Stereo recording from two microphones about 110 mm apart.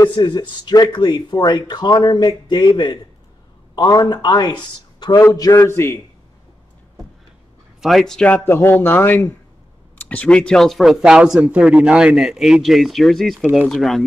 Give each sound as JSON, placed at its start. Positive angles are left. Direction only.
{"t": 0.0, "sound": "speech", "side_deg": 40}
{"t": 7.8, "sound": "speech", "side_deg": 0}
{"t": 8.5, "sound": "speech", "side_deg": 20}
{"t": 13.4, "sound": "speech", "side_deg": -10}
{"t": 13.7, "sound": "speech", "side_deg": 0}